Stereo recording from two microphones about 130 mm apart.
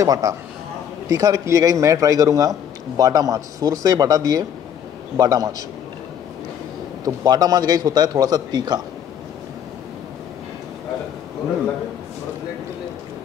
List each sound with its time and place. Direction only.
0.0 s a man's voice: 25° right (ahead or behind)
7.1 s a man's voice: 30° right (ahead or behind)